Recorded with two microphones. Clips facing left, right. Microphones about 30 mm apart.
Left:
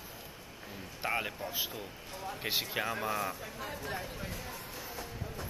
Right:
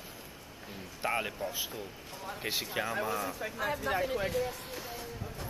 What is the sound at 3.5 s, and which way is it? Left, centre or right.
Speech, right.